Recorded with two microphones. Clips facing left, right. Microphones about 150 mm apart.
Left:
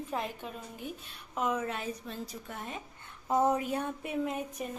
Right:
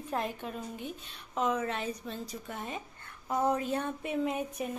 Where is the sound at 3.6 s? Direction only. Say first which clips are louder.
Right 1 dB; 10° left (ahead or behind).